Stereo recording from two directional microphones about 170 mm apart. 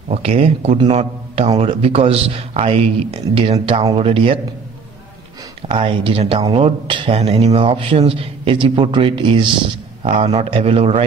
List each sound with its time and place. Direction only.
0.1 s a man's voice: 35° right (ahead or behind)
5.7 s a man's voice: 35° right (ahead or behind)